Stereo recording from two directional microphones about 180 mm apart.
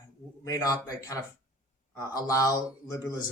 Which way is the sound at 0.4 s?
20° left (ahead or behind).